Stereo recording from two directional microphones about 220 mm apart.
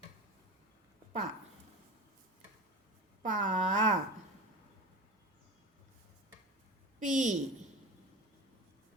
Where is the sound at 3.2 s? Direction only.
35° right (ahead or behind).